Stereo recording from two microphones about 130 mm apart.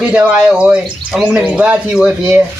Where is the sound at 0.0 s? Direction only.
10° right (ahead or behind).